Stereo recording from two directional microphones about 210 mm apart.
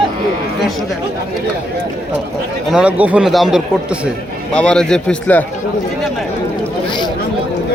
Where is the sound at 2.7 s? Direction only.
5° right (ahead or behind).